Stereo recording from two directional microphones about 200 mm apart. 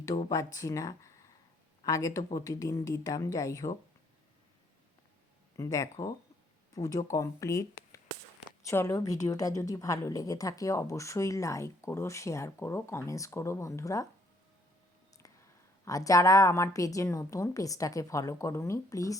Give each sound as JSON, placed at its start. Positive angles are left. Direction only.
{"t": 0.3, "sound": "a woman's voice", "side_deg": 15}
{"t": 5.5, "sound": "a woman's voice", "side_deg": 15}
{"t": 15.2, "sound": "a sound", "side_deg": 15}
{"t": 15.8, "sound": "a woman's voice", "side_deg": 15}